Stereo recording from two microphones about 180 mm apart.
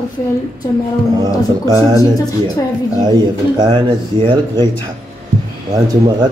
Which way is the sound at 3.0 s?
20° right (ahead or behind).